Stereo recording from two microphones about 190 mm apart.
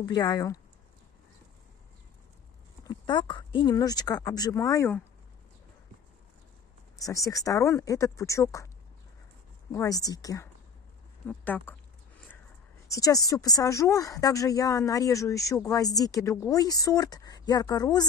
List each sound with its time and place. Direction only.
0.0 s speech: 20° left (ahead or behind)
2.9 s speech: 25° left (ahead or behind)
7.0 s speech: 20° left (ahead or behind)
9.7 s speech: 15° left (ahead or behind)
12.8 s speech: 15° left (ahead or behind)